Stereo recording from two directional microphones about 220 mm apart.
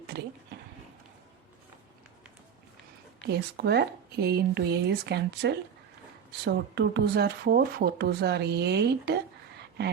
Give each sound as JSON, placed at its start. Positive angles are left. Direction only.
{"t": 3.2, "sound": "speech", "side_deg": -50}